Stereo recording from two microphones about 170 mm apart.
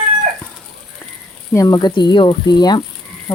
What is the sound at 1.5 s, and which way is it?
Speech, 20° left (ahead or behind).